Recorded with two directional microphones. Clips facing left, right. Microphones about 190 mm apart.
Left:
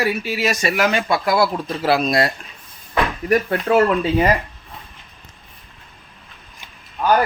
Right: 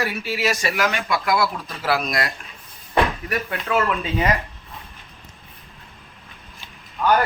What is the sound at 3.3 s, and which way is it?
Speech, 35° left (ahead or behind).